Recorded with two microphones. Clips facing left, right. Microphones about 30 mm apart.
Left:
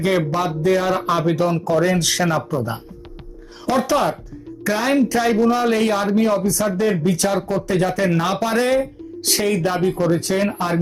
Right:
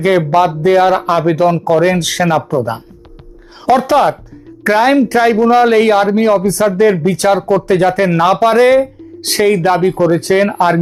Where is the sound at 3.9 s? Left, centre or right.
Right.